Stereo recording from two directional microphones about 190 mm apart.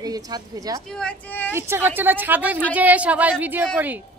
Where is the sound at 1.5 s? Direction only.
10° right (ahead or behind).